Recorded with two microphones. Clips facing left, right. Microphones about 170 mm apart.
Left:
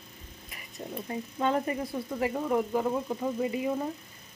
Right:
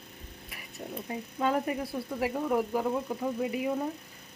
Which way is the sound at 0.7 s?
5° right (ahead or behind).